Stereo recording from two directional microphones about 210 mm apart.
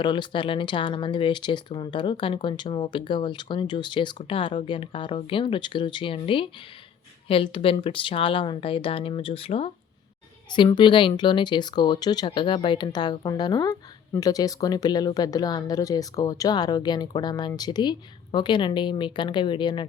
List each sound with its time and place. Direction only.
0.0 s speech: 20° left (ahead or behind)